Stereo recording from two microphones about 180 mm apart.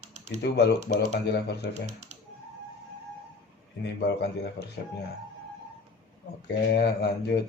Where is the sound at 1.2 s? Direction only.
70° left (ahead or behind).